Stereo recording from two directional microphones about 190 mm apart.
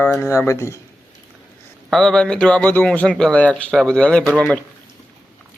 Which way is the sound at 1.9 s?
5° left (ahead or behind).